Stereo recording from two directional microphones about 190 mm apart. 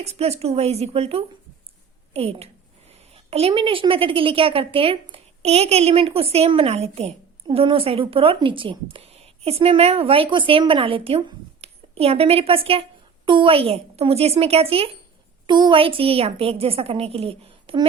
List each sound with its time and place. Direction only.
0.0 s a woman's voice: 35° right (ahead or behind)